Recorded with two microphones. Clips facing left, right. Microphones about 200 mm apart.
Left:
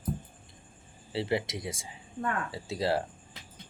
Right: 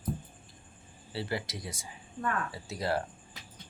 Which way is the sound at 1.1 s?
25° left (ahead or behind).